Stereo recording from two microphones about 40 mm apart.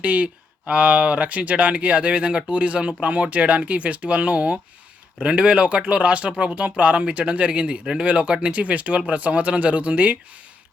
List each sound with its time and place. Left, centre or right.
0.0 s speech: right